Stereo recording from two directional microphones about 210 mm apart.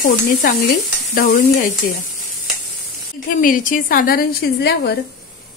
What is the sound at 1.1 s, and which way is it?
Speech, 40° left (ahead or behind).